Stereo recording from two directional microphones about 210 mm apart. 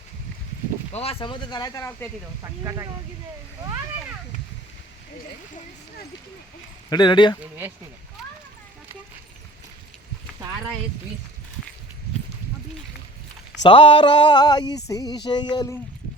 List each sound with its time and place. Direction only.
0.9 s speech: 25° left (ahead or behind)
2.4 s speech: 15° right (ahead or behind)
6.9 s speech: 20° left (ahead or behind)
13.6 s speech: 25° left (ahead or behind)